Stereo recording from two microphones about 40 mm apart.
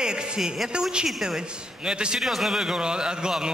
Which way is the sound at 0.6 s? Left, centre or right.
Centre.